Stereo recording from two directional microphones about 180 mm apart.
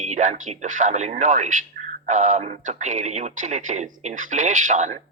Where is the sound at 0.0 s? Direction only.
40° right (ahead or behind).